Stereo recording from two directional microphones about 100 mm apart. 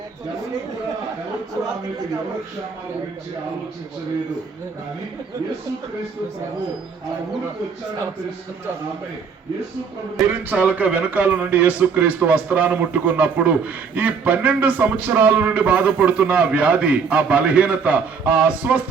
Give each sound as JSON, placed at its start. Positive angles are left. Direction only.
{"t": 10.2, "sound": "a man's voice", "side_deg": -15}